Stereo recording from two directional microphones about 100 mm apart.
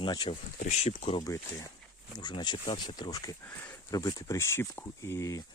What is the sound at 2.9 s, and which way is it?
Speech, 40° left (ahead or behind).